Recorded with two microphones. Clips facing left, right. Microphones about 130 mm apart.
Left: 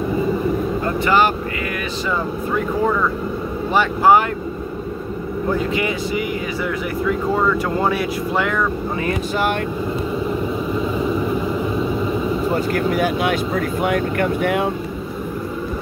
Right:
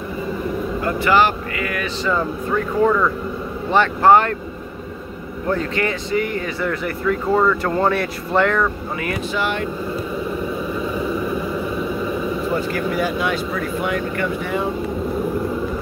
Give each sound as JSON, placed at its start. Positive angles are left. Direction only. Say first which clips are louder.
{"t": 0.8, "sound": "vehicle", "louder": "right 1 dB", "side_deg": 20}
{"t": 2.0, "sound": "speech", "louder": "right 2 dB", "side_deg": 10}
{"t": 5.5, "sound": "speech", "louder": "even", "side_deg": 10}
{"t": 12.5, "sound": "speech", "louder": "left 2 dB", "side_deg": 50}